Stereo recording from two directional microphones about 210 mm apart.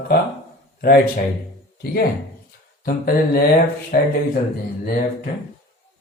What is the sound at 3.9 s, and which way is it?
Speech, 45° left (ahead or behind).